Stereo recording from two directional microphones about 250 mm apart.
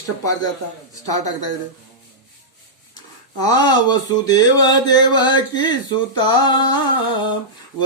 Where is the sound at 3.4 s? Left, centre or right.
Centre.